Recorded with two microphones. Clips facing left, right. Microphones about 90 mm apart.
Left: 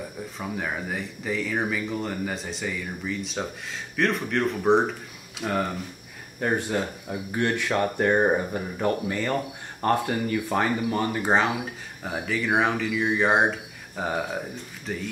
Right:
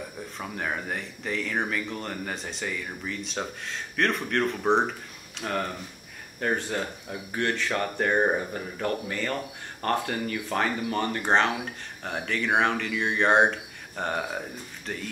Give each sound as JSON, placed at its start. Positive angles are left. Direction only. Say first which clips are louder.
{"t": 0.4, "sound": "speech", "louder": "left 1 dB", "side_deg": 0}